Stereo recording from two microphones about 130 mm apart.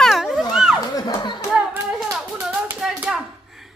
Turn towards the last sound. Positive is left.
turn(degrees=-5)  # may be behind; listen again after turning